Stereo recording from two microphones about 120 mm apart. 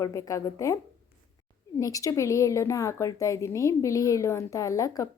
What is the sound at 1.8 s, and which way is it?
A woman's voice, 30° left (ahead or behind).